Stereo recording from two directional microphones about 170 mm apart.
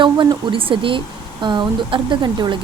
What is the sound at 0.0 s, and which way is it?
Speech, 30° right (ahead or behind).